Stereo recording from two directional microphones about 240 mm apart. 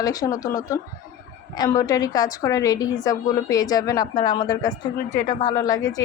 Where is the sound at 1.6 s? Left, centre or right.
Centre.